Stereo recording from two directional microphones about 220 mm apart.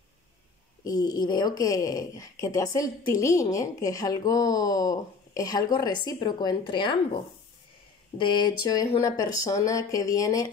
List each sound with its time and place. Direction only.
0.8 s a woman's voice: 20° left (ahead or behind)